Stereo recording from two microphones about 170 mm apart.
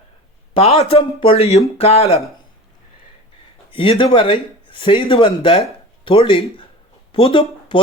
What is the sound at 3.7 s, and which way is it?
Speech, 30° left (ahead or behind).